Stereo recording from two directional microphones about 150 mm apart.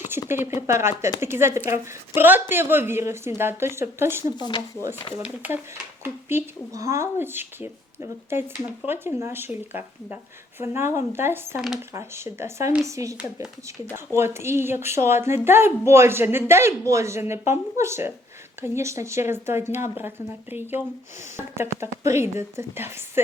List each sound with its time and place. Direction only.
0.1 s speech: 15° right (ahead or behind)
4.4 s speech: 30° left (ahead or behind)
5.2 s speech: 10° right (ahead or behind)
10.6 s speech: 15° right (ahead or behind)
14.2 s speech: 15° right (ahead or behind)